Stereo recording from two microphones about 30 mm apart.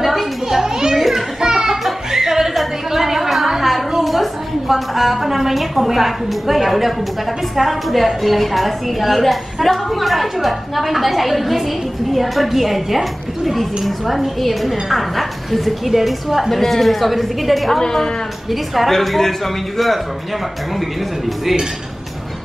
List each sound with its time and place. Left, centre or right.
0.0 s children playing: centre
0.5 s children playing: centre
0.9 s children playing: centre
1.4 s music: right
2.0 s music: centre
2.9 s a sound: centre
4.0 s a woman's voice: centre
17.7 s a man's voice: centre